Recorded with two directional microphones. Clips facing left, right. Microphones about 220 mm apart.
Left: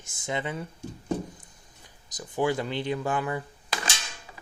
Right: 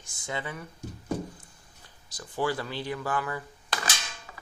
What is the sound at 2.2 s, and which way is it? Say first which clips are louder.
Speech: left 3 dB; 20° left (ahead or behind).